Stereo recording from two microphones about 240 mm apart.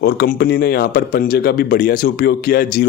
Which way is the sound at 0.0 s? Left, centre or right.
Left.